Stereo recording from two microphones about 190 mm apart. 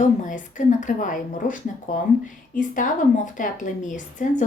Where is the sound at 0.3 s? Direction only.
40° left (ahead or behind).